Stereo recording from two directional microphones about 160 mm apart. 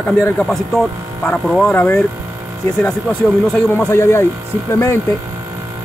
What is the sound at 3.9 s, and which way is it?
Speech, 15° left (ahead or behind).